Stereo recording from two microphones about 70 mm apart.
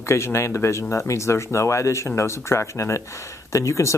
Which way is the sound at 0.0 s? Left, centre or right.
Left.